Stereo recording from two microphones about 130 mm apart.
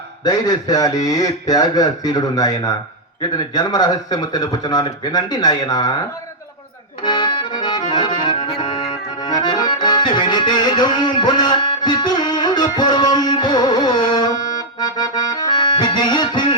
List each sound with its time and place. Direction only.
0.3 s a man's voice: 30° left (ahead or behind)
7.0 s accordion: 35° left (ahead or behind)
12.7 s music: 35° left (ahead or behind)